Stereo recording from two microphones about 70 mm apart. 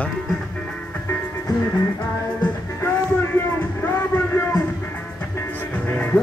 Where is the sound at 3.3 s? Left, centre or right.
Left.